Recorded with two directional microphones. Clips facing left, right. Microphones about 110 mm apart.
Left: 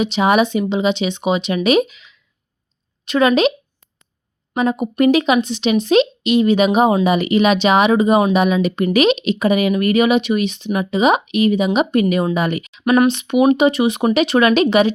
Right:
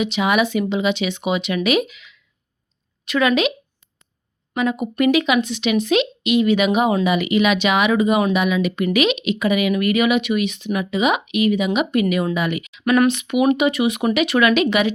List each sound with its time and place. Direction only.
0.0 s speech: 35° left (ahead or behind)
4.5 s speech: 35° left (ahead or behind)
12.8 s speech: 25° left (ahead or behind)